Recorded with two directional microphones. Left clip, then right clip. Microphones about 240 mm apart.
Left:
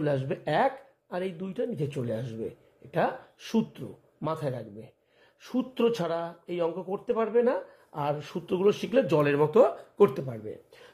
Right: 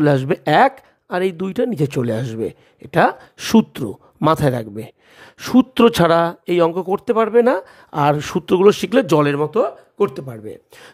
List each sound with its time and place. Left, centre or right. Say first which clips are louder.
0.0 s speech: right 13 dB; right